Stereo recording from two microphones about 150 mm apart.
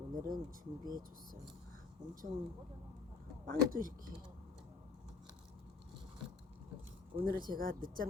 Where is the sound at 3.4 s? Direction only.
70° right (ahead or behind).